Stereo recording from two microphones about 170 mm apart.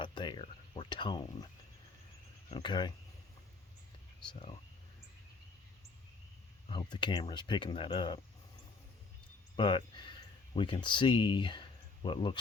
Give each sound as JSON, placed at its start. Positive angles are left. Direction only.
{"t": 0.0, "sound": "speech", "side_deg": 25}
{"t": 2.5, "sound": "speech", "side_deg": 25}
{"t": 4.3, "sound": "speech", "side_deg": 30}
{"t": 6.7, "sound": "speech", "side_deg": 25}
{"t": 9.6, "sound": "speech", "side_deg": 30}